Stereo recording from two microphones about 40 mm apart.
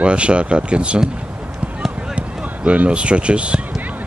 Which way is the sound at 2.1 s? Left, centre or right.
Right.